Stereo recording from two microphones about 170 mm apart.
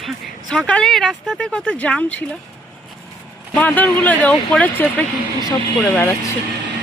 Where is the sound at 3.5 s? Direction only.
10° left (ahead or behind).